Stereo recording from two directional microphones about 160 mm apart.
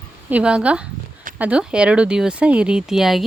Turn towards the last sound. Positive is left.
turn(degrees=0)  # may be behind; listen again after turning